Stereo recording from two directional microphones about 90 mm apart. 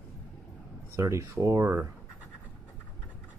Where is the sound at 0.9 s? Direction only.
35° right (ahead or behind).